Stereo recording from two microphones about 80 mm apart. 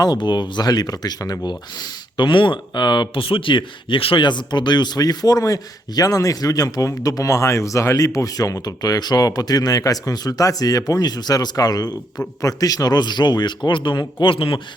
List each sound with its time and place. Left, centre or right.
0.0 s speech: left
13.7 s a man's voice: left
14.2 s a man's voice: left